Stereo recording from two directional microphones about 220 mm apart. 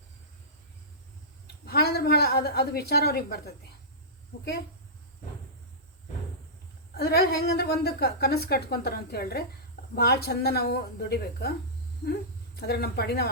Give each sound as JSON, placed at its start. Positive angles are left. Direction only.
{"t": 1.6, "sound": "a woman's voice", "side_deg": 45}
{"t": 6.9, "sound": "a woman's voice", "side_deg": 45}
{"t": 12.5, "sound": "a woman's voice", "side_deg": 45}